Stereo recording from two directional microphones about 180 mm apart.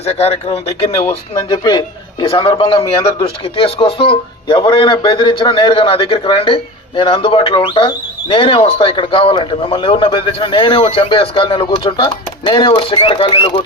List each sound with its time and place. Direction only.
0.0 s speech: 35° left (ahead or behind)
1.5 s a man's voice: 25° left (ahead or behind)